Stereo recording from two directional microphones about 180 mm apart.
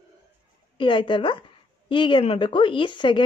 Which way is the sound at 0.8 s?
25° left (ahead or behind).